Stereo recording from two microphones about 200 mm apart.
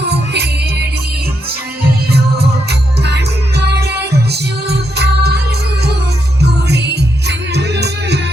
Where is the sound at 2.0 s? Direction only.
55° right (ahead or behind).